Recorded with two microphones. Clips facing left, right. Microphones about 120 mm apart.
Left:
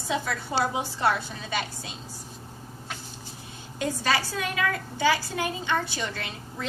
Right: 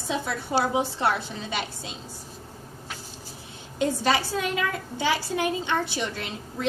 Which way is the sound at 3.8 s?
20° right (ahead or behind).